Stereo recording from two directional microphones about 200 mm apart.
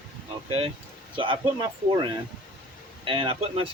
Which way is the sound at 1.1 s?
25° right (ahead or behind).